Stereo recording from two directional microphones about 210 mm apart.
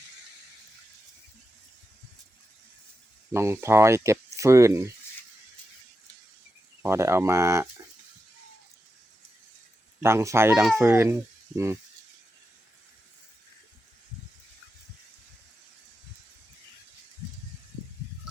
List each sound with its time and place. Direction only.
3.3 s speech: 10° right (ahead or behind)
6.8 s speech: 10° right (ahead or behind)
10.0 s speech: 10° right (ahead or behind)